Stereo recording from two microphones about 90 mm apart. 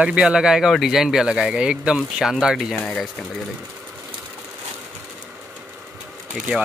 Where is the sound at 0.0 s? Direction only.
10° right (ahead or behind).